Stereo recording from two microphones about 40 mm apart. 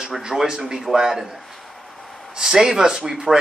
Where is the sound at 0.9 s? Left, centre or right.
Centre.